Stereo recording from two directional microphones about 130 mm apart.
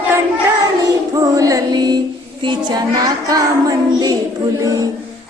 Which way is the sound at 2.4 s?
35° right (ahead or behind).